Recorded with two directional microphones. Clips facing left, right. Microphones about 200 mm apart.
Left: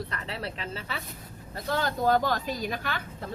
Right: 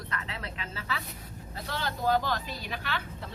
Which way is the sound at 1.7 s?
45° left (ahead or behind).